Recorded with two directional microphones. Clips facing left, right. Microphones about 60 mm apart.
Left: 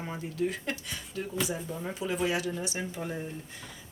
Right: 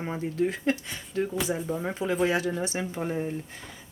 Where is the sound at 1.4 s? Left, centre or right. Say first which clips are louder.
Right 5 dB; right.